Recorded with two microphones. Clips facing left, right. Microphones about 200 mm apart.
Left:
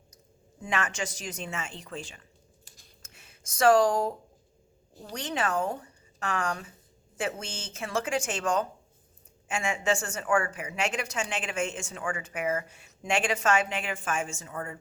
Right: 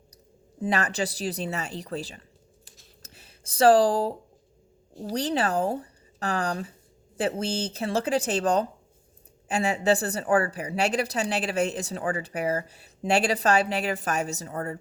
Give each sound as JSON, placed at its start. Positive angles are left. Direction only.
{"t": 0.6, "sound": "speech", "side_deg": -35}
{"t": 3.0, "sound": "a sound", "side_deg": -35}
{"t": 5.1, "sound": "speech", "side_deg": -35}